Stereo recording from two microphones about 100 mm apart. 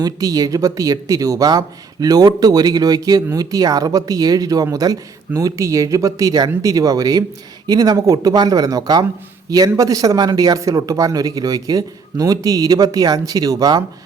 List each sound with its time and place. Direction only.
0.0 s speech: 40° right (ahead or behind)